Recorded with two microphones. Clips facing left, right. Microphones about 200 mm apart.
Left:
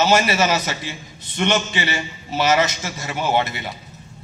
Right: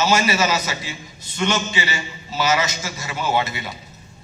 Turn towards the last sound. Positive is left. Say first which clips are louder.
# left 1 dB
turn(degrees=55)  # may be behind; listen again after turning